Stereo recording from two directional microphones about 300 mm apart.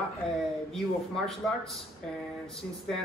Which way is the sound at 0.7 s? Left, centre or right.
Centre.